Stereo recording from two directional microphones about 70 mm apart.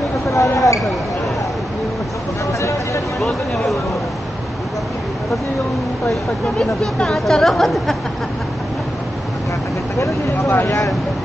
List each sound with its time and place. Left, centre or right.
0.3 s speech: left
3.2 s speech: centre
6.6 s speech: centre
9.9 s speech: left